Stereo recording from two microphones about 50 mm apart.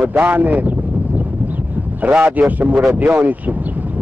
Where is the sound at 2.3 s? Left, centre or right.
Right.